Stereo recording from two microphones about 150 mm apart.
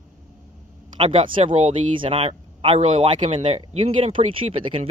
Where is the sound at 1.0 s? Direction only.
40° right (ahead or behind).